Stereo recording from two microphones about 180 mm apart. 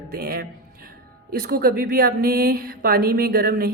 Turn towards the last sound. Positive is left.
turn(degrees=-60)  # may be behind; listen again after turning